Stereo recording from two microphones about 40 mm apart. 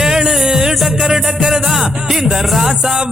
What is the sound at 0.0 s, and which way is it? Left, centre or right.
Music, centre.